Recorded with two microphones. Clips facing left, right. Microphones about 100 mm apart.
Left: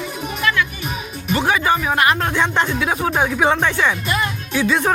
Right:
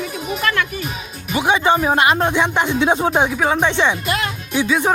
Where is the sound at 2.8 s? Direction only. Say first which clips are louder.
Right 3 dB; 25° right (ahead or behind).